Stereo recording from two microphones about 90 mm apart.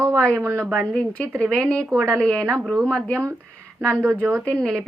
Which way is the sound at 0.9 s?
15° left (ahead or behind).